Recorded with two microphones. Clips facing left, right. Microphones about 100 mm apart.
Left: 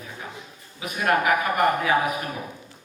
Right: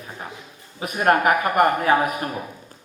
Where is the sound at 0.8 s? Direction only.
40° right (ahead or behind).